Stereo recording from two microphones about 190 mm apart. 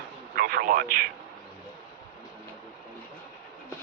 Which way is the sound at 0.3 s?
50° right (ahead or behind).